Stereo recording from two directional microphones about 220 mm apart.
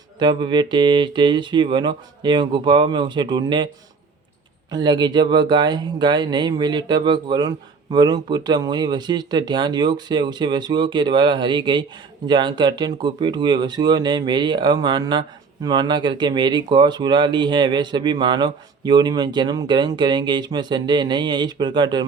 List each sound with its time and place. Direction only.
0.2 s speech: 20° right (ahead or behind)
4.7 s speech: 20° right (ahead or behind)